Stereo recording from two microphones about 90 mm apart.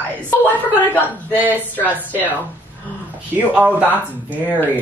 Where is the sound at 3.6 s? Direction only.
15° right (ahead or behind).